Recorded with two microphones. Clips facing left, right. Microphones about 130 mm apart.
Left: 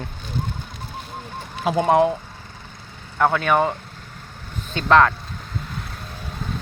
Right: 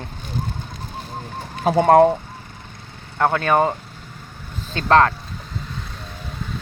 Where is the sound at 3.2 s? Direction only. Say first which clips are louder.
Right 1 dB; 35° right (ahead or behind).